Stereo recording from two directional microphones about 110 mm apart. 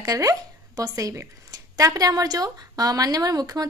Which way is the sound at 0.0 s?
30° right (ahead or behind).